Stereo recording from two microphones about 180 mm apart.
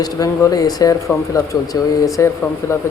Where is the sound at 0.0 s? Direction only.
20° left (ahead or behind).